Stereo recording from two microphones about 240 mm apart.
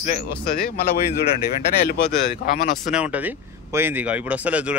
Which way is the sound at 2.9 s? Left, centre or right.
Centre.